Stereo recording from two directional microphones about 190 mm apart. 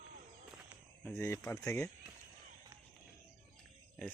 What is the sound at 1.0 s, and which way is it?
Speech, 10° left (ahead or behind).